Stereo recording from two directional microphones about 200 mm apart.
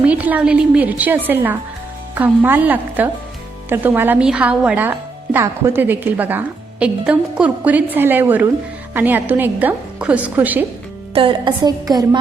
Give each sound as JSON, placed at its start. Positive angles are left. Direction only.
{"t": 0.0, "sound": "a woman's voice", "side_deg": -5}
{"t": 11.1, "sound": "a woman's voice", "side_deg": -25}